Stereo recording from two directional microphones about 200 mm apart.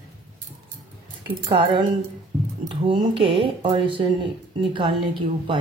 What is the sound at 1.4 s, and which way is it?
Speech, 25° right (ahead or behind).